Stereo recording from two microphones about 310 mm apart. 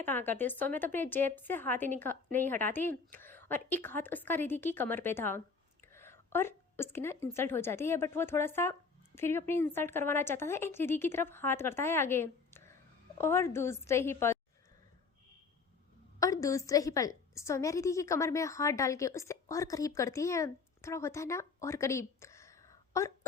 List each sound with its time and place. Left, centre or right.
0.0 s a woman's voice: centre
16.2 s a woman's voice: centre